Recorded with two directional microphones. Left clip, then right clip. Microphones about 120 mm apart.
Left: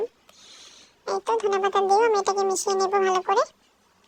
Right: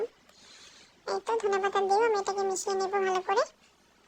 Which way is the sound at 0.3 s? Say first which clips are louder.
Left 5 dB; 30° left (ahead or behind).